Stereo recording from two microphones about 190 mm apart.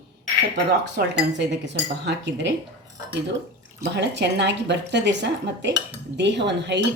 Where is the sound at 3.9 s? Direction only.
65° right (ahead or behind).